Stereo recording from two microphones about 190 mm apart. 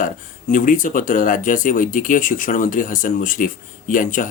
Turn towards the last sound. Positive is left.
turn(degrees=45)  # may be behind; listen again after turning